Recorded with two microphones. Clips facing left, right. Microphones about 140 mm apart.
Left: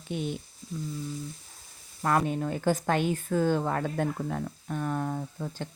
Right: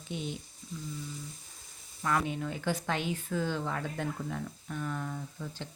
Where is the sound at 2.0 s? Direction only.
45° left (ahead or behind).